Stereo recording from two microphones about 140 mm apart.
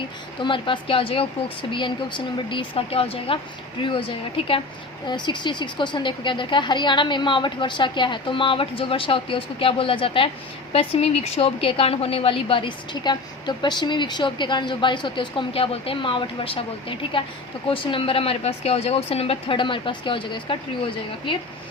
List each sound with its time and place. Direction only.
0.4 s a woman's voice: 35° left (ahead or behind)
5.0 s a woman's voice: 30° left (ahead or behind)